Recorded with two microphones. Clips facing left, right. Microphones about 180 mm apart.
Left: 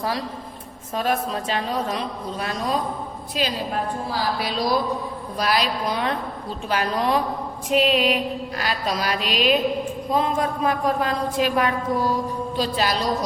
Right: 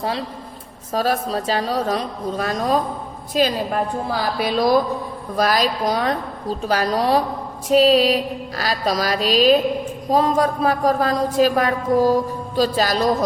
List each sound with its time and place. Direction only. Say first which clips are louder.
0.0 s a woman's voice: right 2 dB; 25° right (ahead or behind)